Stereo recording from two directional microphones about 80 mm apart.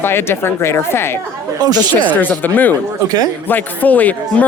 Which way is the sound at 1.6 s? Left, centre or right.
Right.